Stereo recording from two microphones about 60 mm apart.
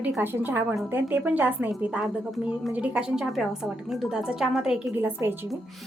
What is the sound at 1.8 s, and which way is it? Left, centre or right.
A woman's voice, centre.